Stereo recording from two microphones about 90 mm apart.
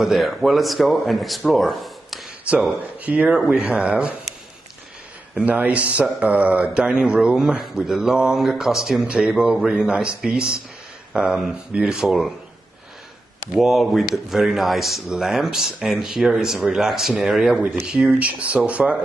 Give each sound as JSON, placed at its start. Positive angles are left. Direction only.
{"t": 0.0, "sound": "speech", "side_deg": 0}
{"t": 3.0, "sound": "speech", "side_deg": -15}
{"t": 5.4, "sound": "speech", "side_deg": -15}
{"t": 13.5, "sound": "speech", "side_deg": 0}